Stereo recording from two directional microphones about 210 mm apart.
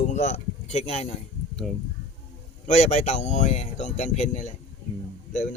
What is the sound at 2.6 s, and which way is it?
A man's voice, 30° left (ahead or behind).